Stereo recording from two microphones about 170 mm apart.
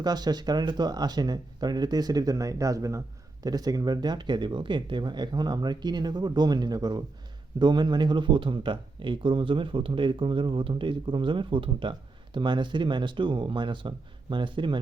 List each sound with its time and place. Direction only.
0.0 s speech: 25° right (ahead or behind)